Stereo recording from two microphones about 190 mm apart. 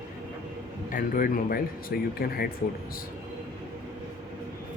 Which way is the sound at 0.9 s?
45° left (ahead or behind).